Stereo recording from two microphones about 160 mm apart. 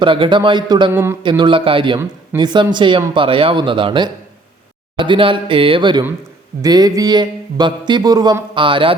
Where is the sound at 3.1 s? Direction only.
35° right (ahead or behind).